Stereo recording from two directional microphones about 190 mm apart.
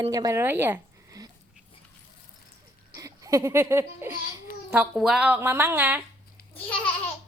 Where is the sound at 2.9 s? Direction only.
15° right (ahead or behind).